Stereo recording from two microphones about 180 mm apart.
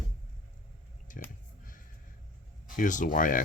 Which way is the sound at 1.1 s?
45° left (ahead or behind).